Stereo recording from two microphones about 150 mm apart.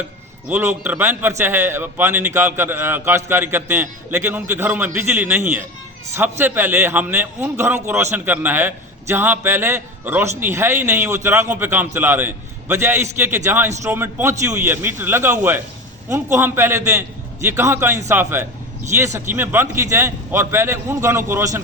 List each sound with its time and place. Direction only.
0.4 s a man's voice: 10° right (ahead or behind)